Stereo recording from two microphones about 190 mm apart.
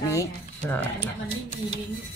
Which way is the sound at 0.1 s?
10° left (ahead or behind).